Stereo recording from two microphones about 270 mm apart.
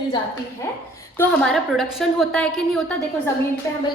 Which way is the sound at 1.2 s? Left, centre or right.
Centre.